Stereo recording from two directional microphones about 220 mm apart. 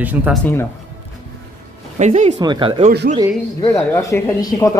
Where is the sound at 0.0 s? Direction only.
5° right (ahead or behind).